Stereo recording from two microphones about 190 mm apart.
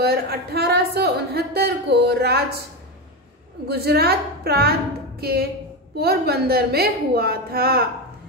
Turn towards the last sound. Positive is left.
turn(degrees=-55)  # may be behind; listen again after turning